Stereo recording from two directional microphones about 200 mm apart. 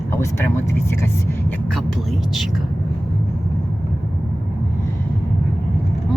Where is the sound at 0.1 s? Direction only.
15° left (ahead or behind).